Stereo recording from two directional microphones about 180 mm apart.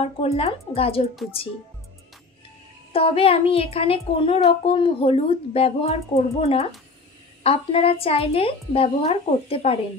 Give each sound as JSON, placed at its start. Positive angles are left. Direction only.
{"t": 0.0, "sound": "a child's voice", "side_deg": 35}
{"t": 2.9, "sound": "a child's voice", "side_deg": 30}